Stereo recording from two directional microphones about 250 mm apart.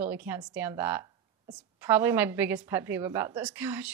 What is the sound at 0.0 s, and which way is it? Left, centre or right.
A woman's voice, centre.